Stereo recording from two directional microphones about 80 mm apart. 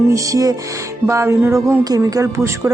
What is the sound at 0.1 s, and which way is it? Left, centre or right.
Speech, right.